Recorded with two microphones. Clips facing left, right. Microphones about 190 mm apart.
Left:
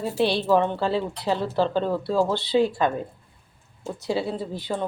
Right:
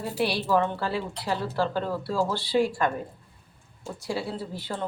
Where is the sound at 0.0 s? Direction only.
25° left (ahead or behind).